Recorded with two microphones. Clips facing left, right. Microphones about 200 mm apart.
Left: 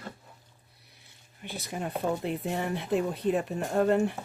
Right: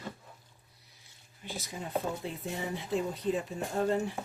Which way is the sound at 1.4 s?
60° left (ahead or behind).